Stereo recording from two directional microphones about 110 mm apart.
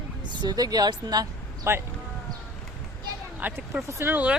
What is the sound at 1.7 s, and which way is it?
Speech, 25° right (ahead or behind).